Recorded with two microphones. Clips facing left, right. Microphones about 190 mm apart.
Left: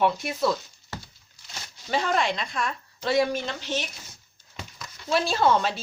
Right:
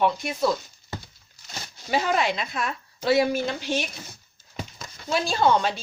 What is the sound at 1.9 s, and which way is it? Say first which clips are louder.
A woman's voice: right 1 dB; 5° right (ahead or behind).